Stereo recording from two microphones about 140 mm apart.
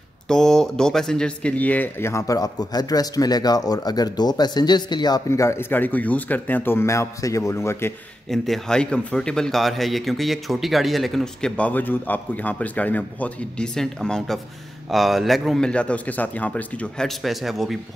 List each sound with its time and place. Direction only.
0.3 s speech: 5° left (ahead or behind)
8.3 s speech: centre (ahead or behind)